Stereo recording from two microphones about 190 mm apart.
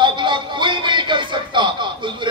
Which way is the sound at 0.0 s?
25° right (ahead or behind).